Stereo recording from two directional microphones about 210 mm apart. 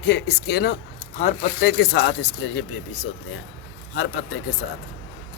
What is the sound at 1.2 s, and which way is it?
Speech, 35° left (ahead or behind).